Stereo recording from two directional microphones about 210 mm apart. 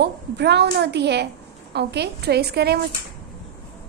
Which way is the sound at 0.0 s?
55° right (ahead or behind).